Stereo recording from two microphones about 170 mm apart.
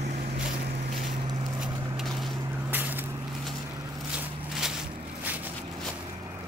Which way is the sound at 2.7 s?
10° right (ahead or behind).